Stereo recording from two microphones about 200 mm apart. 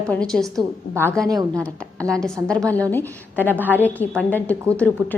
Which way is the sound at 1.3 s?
20° right (ahead or behind).